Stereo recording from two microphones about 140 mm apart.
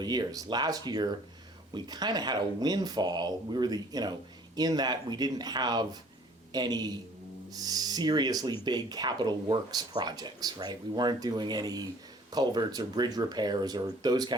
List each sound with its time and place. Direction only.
0.0 s speech: 30° right (ahead or behind)